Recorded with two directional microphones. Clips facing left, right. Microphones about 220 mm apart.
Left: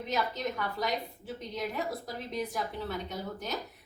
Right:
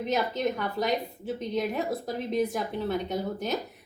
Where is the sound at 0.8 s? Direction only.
25° right (ahead or behind).